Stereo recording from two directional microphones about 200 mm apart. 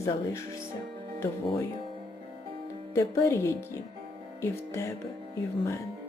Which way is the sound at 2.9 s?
15° left (ahead or behind).